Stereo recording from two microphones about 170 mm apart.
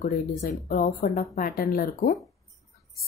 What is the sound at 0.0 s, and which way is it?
Speech, 55° left (ahead or behind).